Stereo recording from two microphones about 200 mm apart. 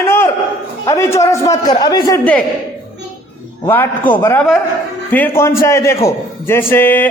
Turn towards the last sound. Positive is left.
turn(degrees=10)  # may be behind; listen again after turning